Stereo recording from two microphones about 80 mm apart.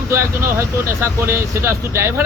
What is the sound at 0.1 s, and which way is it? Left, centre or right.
Speech, right.